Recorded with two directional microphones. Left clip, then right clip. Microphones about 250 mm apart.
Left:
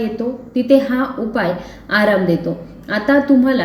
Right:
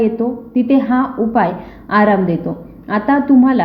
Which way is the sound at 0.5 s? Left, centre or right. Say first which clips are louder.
Left 1 dB; right.